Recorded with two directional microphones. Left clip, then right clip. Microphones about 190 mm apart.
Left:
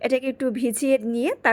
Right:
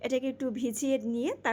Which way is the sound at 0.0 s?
25° left (ahead or behind).